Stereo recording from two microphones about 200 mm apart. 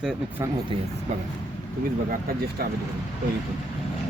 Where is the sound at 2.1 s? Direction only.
50° right (ahead or behind).